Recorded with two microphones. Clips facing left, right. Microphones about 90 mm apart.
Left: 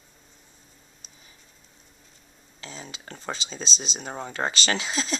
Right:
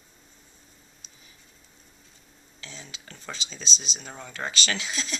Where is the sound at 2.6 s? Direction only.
40° left (ahead or behind).